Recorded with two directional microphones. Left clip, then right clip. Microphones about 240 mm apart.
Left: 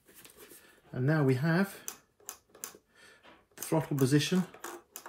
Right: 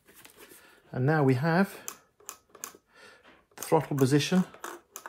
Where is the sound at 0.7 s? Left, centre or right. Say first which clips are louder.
Right 4 dB; right.